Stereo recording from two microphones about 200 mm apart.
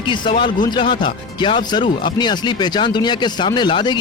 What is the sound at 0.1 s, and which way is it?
Speech, 25° left (ahead or behind).